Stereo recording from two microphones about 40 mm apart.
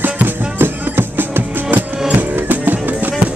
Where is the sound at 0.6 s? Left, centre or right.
Right.